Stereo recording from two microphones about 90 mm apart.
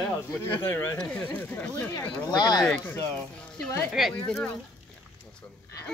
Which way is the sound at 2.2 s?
50° left (ahead or behind).